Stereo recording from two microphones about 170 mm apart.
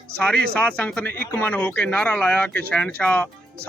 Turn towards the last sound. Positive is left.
turn(degrees=5)  # may be behind; listen again after turning